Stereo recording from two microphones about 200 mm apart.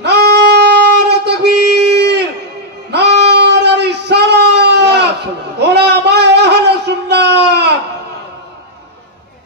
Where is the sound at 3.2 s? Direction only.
55° right (ahead or behind).